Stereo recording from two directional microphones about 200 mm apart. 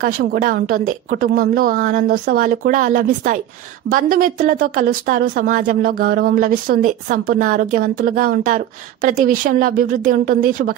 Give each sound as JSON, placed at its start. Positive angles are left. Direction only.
{"t": 0.0, "sound": "speech", "side_deg": -45}